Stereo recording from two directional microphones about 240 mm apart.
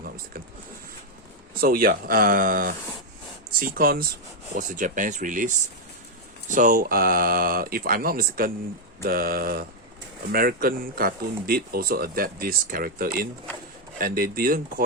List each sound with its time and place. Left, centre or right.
1.6 s speech: right